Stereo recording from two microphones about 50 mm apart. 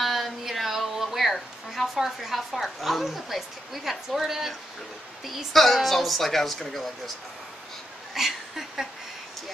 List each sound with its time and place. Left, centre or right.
0.0 s a woman's voice: centre
8.1 s speech: centre